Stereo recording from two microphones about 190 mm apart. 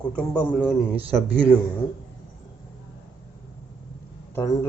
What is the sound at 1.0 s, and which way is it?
Speech, 30° right (ahead or behind).